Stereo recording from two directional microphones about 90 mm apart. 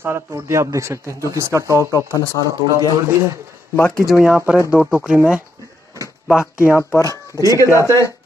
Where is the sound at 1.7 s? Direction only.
35° left (ahead or behind).